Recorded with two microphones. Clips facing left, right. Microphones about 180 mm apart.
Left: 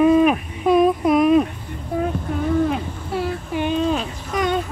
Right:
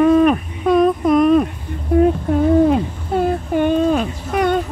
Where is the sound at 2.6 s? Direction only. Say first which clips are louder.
Right 7 dB; 50° right (ahead or behind).